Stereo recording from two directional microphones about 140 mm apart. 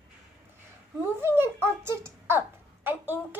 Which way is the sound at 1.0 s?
15° right (ahead or behind).